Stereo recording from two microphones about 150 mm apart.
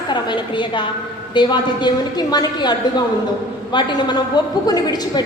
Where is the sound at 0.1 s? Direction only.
30° left (ahead or behind).